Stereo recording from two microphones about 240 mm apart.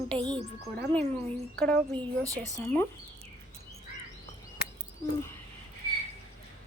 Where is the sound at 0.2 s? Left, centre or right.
Centre.